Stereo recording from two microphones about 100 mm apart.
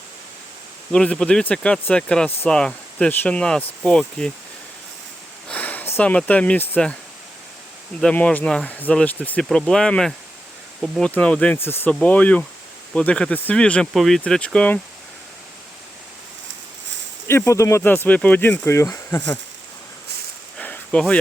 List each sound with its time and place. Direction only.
0.9 s speech: 10° left (ahead or behind)
5.5 s speech: 15° left (ahead or behind)
8.0 s speech: 15° left (ahead or behind)
11.5 s speech: 20° left (ahead or behind)
17.2 s speech: 30° left (ahead or behind)
18.7 s speech: 30° left (ahead or behind)
20.6 s a sound: 15° left (ahead or behind)